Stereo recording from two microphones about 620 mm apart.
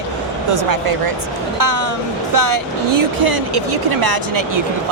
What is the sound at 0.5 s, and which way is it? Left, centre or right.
A woman's voice, right.